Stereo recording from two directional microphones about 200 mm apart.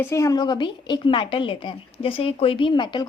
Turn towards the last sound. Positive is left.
turn(degrees=25)  # may be behind; listen again after turning